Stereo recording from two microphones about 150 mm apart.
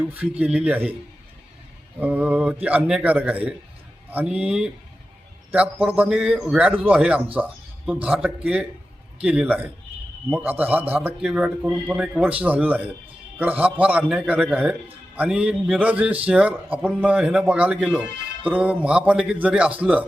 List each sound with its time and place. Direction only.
0.0 s a man's voice: 10° right (ahead or behind)
2.0 s a man's voice: 10° right (ahead or behind)
7.3 s a sound: 10° right (ahead or behind)
8.0 s a man's voice: 10° right (ahead or behind)